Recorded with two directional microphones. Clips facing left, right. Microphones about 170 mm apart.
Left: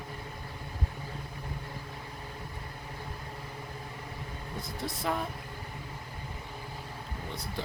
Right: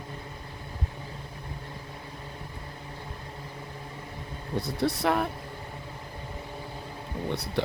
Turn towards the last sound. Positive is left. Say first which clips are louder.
# right 9 dB
turn(degrees=-70)  # may be behind; listen again after turning